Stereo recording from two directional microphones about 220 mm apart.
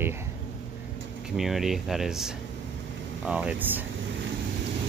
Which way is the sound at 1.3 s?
Centre (ahead or behind).